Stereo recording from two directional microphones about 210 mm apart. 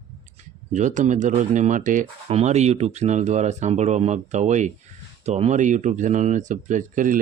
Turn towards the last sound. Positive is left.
turn(degrees=-40)  # may be behind; listen again after turning